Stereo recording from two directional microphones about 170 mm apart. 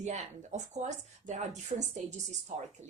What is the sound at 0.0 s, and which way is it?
A woman's voice, 45° right (ahead or behind).